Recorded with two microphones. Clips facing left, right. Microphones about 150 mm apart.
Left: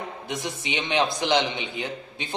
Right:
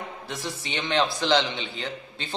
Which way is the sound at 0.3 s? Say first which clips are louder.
Left 3 dB; 20° left (ahead or behind).